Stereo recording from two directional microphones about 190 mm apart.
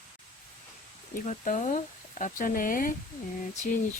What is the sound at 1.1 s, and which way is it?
Speech, 40° left (ahead or behind).